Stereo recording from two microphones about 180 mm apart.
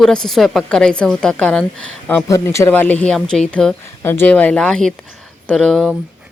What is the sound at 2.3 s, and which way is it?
Speech, 15° left (ahead or behind).